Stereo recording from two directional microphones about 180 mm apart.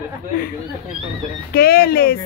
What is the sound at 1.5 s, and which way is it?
Speech, 60° left (ahead or behind).